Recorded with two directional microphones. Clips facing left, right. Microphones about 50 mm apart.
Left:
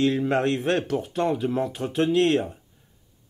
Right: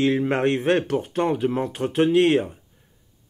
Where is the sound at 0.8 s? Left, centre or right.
Right; by 2.5 s centre.